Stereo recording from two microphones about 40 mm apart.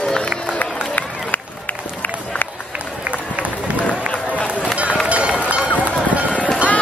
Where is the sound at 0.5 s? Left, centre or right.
Left.